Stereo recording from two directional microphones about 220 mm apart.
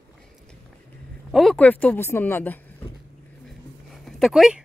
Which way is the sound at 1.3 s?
Centre (ahead or behind).